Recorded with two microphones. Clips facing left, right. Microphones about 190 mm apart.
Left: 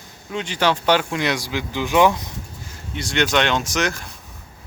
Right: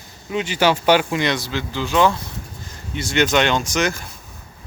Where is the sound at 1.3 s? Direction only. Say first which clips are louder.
Right 1 dB; 10° left (ahead or behind).